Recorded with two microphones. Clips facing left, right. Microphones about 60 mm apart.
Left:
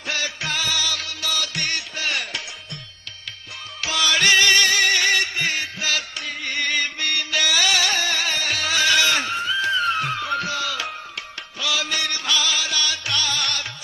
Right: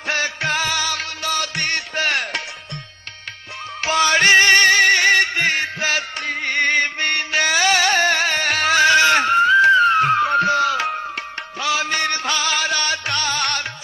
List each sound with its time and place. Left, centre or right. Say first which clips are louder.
0.1 s music: right 5 dB; right
3.8 s music: right 5 dB; right